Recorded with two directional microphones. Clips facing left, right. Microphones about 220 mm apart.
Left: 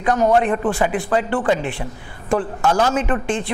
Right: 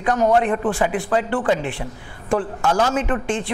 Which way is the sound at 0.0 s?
25° left (ahead or behind).